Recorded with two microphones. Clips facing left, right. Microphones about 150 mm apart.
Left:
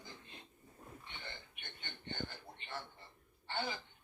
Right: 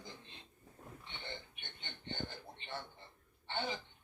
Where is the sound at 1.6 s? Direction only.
20° right (ahead or behind).